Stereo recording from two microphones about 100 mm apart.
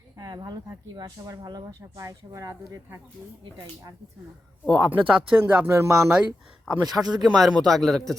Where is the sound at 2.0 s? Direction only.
35° right (ahead or behind).